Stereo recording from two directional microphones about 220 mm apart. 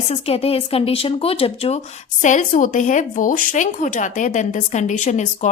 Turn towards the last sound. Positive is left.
turn(degrees=35)  # may be behind; listen again after turning